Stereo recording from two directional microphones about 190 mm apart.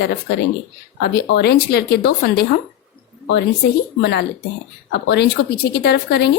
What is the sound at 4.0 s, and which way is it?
Speech, 60° left (ahead or behind).